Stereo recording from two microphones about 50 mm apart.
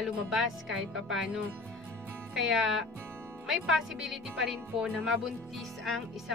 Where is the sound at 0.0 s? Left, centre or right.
Centre.